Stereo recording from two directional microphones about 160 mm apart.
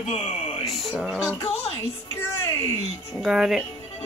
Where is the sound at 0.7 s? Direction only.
Centre (ahead or behind).